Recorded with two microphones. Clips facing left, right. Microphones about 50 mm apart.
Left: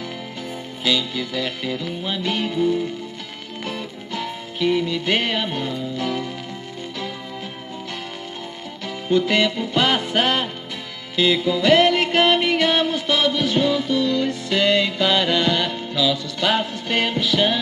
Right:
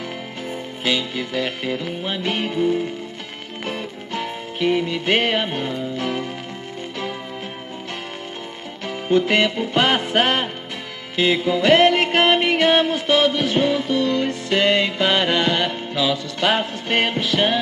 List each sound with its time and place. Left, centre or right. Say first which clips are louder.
0.8 s music: even; right
8.8 s music: right 1 dB; right